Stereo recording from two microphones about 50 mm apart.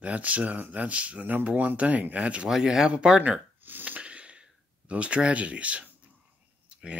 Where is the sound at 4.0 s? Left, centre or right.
Right.